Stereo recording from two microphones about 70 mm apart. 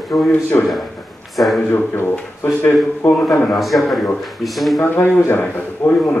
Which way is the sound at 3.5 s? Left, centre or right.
Centre.